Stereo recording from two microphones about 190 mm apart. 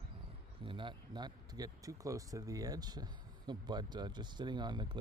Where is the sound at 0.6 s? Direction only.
25° right (ahead or behind).